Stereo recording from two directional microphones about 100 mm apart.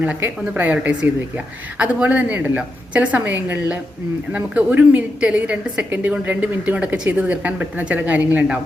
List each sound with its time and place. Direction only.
0.0 s speech: 15° right (ahead or behind)